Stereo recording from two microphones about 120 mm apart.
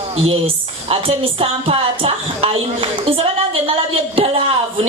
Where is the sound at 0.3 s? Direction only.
50° right (ahead or behind).